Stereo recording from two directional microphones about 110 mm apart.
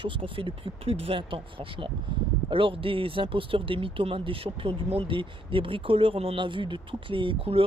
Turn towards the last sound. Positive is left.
turn(degrees=-60)  # may be behind; listen again after turning